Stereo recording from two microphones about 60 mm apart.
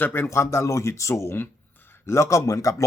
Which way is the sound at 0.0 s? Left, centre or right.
Left.